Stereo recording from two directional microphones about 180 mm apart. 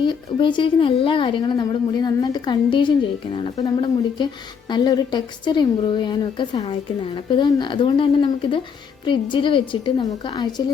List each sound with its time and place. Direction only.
0.0 s a woman's voice: 25° left (ahead or behind)